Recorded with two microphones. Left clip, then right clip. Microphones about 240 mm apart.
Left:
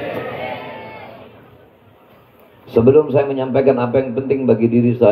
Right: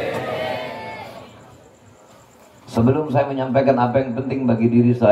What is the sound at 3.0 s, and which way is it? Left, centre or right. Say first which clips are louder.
A man's voice: left 3 dB; left.